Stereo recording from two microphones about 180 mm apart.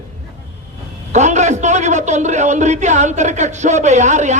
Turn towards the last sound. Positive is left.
turn(degrees=-40)  # may be behind; listen again after turning